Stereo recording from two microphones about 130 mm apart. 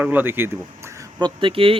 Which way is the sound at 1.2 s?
40° right (ahead or behind).